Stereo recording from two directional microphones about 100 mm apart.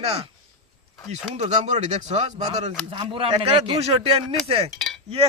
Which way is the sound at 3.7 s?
90° right.